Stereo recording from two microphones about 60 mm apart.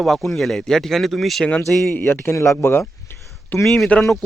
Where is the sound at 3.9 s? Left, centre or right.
Left.